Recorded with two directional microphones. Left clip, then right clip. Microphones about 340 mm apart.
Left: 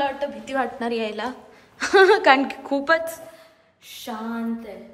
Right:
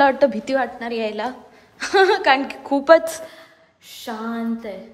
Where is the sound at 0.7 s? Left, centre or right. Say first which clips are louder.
Right 1 dB; centre.